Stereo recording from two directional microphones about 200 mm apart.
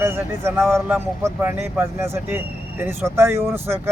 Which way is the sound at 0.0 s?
10° right (ahead or behind).